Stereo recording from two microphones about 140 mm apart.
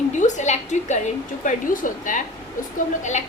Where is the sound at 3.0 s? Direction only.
60° left (ahead or behind).